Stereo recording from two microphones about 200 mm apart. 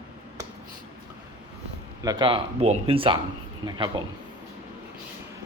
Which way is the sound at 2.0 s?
25° right (ahead or behind).